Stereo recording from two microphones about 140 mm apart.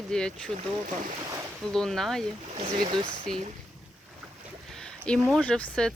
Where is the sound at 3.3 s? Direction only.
5° left (ahead or behind).